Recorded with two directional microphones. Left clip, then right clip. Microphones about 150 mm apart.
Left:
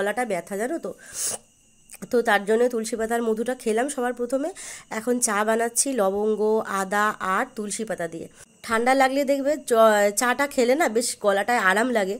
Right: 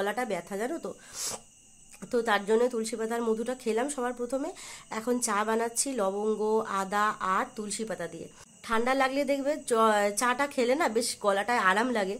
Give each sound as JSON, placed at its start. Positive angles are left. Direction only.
{"t": 0.0, "sound": "a woman's voice", "side_deg": 25}
{"t": 2.0, "sound": "speech", "side_deg": 30}